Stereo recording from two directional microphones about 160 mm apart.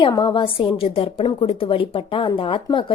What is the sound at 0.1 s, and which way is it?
A woman's voice, 30° left (ahead or behind).